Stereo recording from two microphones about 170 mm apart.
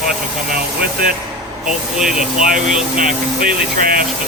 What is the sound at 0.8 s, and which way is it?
Speech, 60° right (ahead or behind).